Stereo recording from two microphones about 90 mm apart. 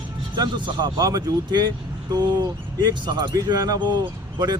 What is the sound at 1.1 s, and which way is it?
Speech, 50° right (ahead or behind).